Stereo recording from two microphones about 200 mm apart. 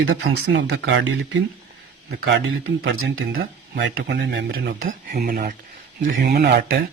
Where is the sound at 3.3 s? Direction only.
55° right (ahead or behind).